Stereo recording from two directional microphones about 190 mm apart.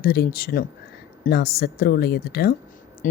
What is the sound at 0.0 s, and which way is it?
A woman's voice, 55° left (ahead or behind).